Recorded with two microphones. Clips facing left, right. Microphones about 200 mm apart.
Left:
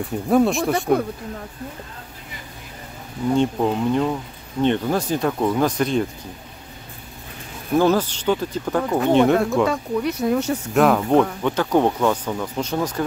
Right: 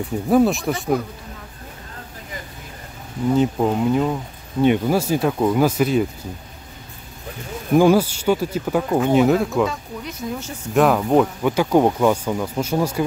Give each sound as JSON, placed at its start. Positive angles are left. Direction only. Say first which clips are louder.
{"t": 0.3, "sound": "speech", "louder": "right 1 dB", "side_deg": 0}
{"t": 3.3, "sound": "speech", "louder": "right 1 dB", "side_deg": -5}
{"t": 7.7, "sound": "speech", "louder": "right 3 dB", "side_deg": -10}
{"t": 9.7, "sound": "speech", "louder": "left 8 dB", "side_deg": 65}
{"t": 10.7, "sound": "speech", "louder": "right 1 dB", "side_deg": 0}